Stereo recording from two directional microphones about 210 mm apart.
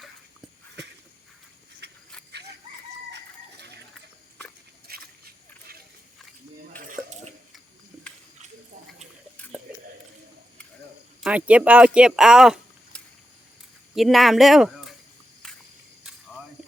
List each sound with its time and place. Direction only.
1.8 s a sound: 50° right (ahead or behind)
2.3 s chicken: 55° right (ahead or behind)
4.9 s a sound: 45° right (ahead or behind)
6.7 s dishes: 40° right (ahead or behind)
11.2 s speech: 5° right (ahead or behind)
15.4 s cricket: 5° left (ahead or behind)